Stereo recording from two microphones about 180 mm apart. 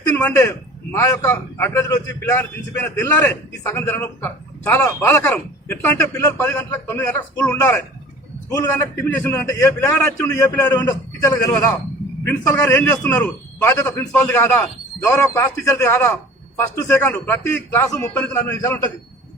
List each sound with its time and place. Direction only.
0.0 s a man's voice: 15° left (ahead or behind)